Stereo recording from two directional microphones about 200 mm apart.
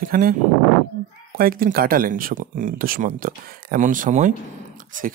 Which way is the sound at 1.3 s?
45° right (ahead or behind).